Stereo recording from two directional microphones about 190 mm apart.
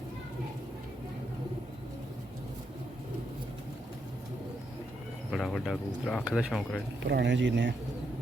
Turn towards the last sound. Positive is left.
turn(degrees=-70)  # may be behind; listen again after turning